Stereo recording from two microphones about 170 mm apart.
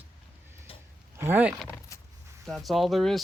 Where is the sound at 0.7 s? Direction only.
35° left (ahead or behind).